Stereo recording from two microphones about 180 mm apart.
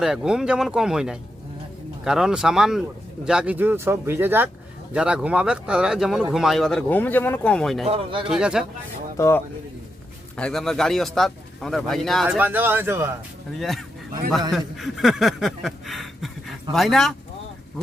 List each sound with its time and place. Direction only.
0.0 s speech: 5° right (ahead or behind)
7.9 s speech: 30° right (ahead or behind)
8.3 s speech: 5° right (ahead or behind)
9.1 s speech: 15° left (ahead or behind)
10.3 s speech: 5° left (ahead or behind); by 13.1 s 15° right (ahead or behind)
13.6 s speech: centre (ahead or behind)